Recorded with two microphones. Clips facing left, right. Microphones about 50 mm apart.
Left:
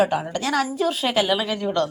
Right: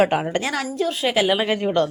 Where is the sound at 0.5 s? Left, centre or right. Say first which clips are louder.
Left 2 dB; centre.